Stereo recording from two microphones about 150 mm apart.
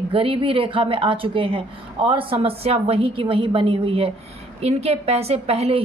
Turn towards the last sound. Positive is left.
turn(degrees=-45)  # may be behind; listen again after turning